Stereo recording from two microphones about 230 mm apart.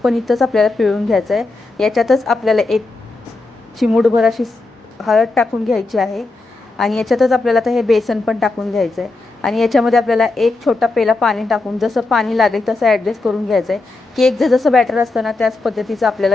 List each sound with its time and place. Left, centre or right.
0.0 s a woman's voice: centre